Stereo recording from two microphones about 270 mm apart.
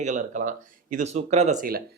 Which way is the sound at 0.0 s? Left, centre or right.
Right.